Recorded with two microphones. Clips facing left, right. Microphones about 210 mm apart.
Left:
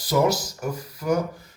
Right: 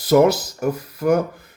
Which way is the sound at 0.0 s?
55° right (ahead or behind).